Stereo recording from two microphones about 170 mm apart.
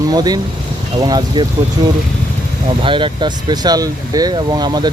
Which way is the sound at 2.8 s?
30° right (ahead or behind).